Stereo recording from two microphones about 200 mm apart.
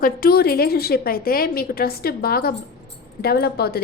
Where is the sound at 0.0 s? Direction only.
45° left (ahead or behind).